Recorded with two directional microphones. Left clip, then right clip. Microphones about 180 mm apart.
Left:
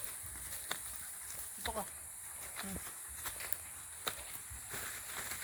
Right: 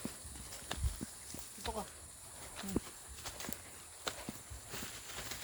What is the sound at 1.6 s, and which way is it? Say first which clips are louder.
Snake: left 1 dB; 15° left (ahead or behind).